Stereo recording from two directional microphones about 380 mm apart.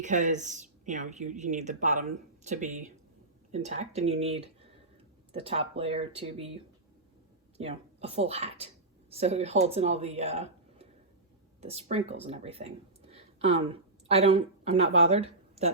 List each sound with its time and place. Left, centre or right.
0.0 s a woman's voice: centre
7.6 s speech: centre